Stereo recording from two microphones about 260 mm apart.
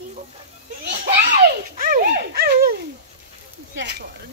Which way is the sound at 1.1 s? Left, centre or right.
Right.